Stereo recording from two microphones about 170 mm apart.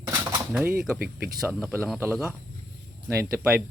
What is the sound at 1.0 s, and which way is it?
Speech, 60° right (ahead or behind).